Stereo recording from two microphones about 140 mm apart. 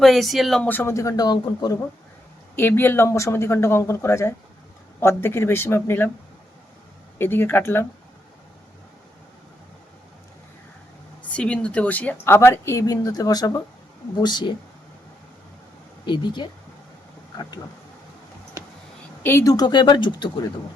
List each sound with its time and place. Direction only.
0.0 s speech: centre (ahead or behind)
0.7 s speech: 15° left (ahead or behind)
2.6 s speech: 15° left (ahead or behind)
7.2 s speech: 15° left (ahead or behind)
11.3 s speech: 10° left (ahead or behind); by 14.5 s 30° left (ahead or behind)
16.0 s speech: 35° left (ahead or behind)
19.2 s speech: 20° left (ahead or behind)